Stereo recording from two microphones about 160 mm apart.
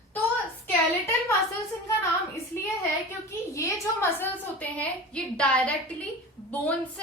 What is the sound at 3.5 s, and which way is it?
A woman's voice, 20° left (ahead or behind).